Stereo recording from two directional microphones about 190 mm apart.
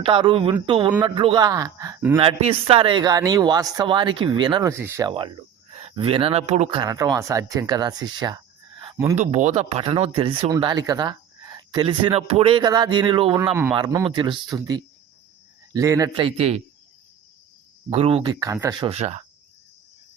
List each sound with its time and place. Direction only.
0.0 s speech: 25° right (ahead or behind)
2.1 s speech: 30° right (ahead or behind)
9.1 s speech: 40° right (ahead or behind)
13.5 s a man's voice: 10° right (ahead or behind)
16.2 s speech: 35° right (ahead or behind)
17.8 s speech: 30° right (ahead or behind); by 18.8 s 15° right (ahead or behind)
18.8 s speech: 30° right (ahead or behind)